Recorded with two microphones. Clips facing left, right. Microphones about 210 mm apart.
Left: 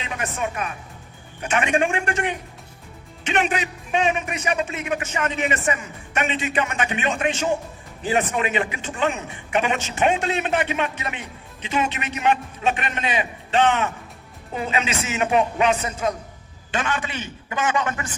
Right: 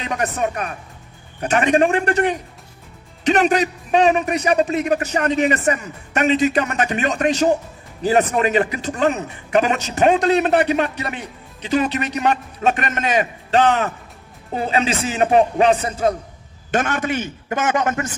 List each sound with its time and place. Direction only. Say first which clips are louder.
0.0 s a man's voice: right 6 dB; 40° right (ahead or behind)
16.7 s a man's voice: right 6 dB; 45° right (ahead or behind)